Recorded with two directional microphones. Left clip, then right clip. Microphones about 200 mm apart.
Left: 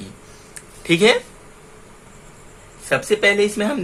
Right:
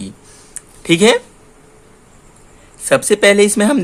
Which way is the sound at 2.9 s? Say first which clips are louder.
Right 6 dB; 45° right (ahead or behind).